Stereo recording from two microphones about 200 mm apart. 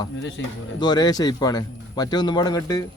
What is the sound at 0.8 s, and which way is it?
A man's voice, 20° left (ahead or behind).